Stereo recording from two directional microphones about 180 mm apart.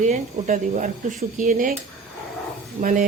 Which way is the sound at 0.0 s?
45° right (ahead or behind).